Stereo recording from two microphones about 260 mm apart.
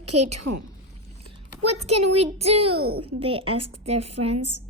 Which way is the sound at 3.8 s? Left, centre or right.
Right.